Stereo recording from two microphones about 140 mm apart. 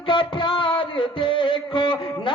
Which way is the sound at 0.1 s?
40° left (ahead or behind).